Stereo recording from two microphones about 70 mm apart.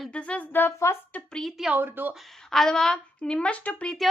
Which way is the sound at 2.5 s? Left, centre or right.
Centre.